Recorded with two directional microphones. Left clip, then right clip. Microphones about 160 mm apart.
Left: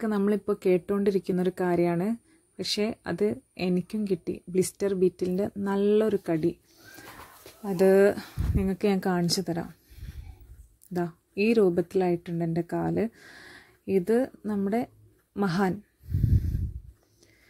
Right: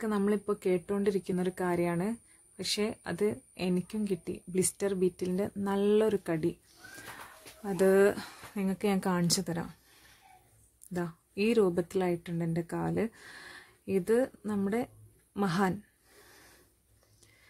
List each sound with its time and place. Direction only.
0.0 s speech: 25° left (ahead or behind)
7.6 s speech: 20° left (ahead or behind)
15.3 s a sound: 20° left (ahead or behind)